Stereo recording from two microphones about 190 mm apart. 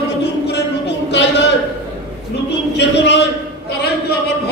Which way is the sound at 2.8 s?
65° left (ahead or behind).